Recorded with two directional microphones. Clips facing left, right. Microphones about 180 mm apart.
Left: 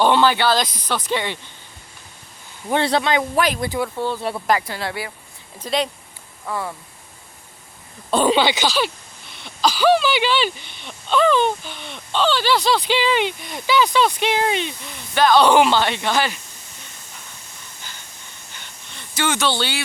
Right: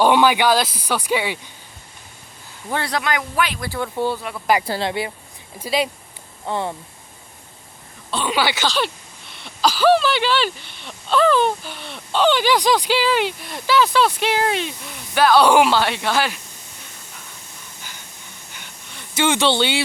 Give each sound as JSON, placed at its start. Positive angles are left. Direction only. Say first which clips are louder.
{"t": 0.0, "sound": "speech", "louder": "right 1 dB", "side_deg": -10}
{"t": 2.6, "sound": "speech", "louder": "left 4 dB", "side_deg": 25}
{"t": 3.9, "sound": "speech", "louder": "right 2 dB", "side_deg": -15}
{"t": 4.2, "sound": "speech", "louder": "left 5 dB", "side_deg": 30}
{"t": 4.6, "sound": "speech", "louder": "right 5 dB", "side_deg": -25}
{"t": 5.5, "sound": "speech", "louder": "right 1 dB", "side_deg": -5}
{"t": 6.4, "sound": "speech", "louder": "right 3 dB", "side_deg": -25}
{"t": 8.3, "sound": "speech", "louder": "right 1 dB", "side_deg": 20}
{"t": 8.7, "sound": "speech", "louder": "left 1 dB", "side_deg": 0}
{"t": 12.2, "sound": "speech", "louder": "right 2 dB", "side_deg": -15}
{"t": 18.5, "sound": "a sound", "louder": "even", "side_deg": -10}
{"t": 19.1, "sound": "speech", "louder": "right 3 dB", "side_deg": -25}